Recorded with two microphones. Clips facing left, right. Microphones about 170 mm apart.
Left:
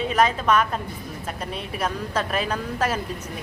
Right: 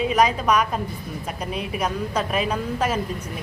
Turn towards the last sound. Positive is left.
turn(degrees=-5)  # may be behind; listen again after turning